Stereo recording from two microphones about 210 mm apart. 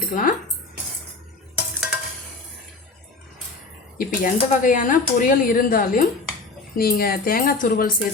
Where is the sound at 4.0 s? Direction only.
40° left (ahead or behind).